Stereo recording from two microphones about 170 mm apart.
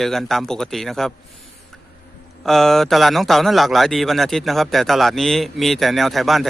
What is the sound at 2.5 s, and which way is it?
Speech, centre (ahead or behind).